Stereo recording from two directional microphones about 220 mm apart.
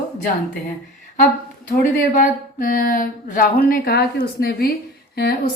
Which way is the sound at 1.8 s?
35° left (ahead or behind).